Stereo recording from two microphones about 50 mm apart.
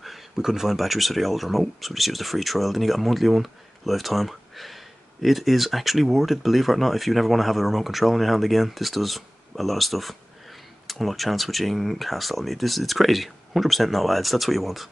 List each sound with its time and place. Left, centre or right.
0.0 s speech: centre